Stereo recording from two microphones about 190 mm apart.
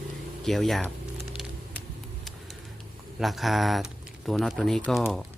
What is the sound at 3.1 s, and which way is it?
Speech, centre (ahead or behind).